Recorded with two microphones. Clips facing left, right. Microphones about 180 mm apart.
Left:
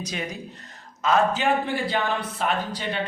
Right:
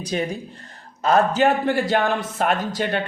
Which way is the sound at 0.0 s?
30° right (ahead or behind).